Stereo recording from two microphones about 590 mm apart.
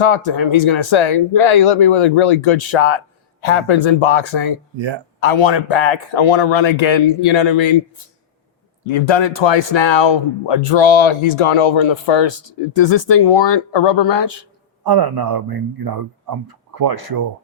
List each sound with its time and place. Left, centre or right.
0.6 s speech: left
8.9 s speech: left
14.8 s speech: right